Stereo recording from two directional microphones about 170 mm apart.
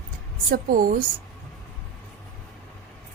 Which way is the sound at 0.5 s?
55° right (ahead or behind).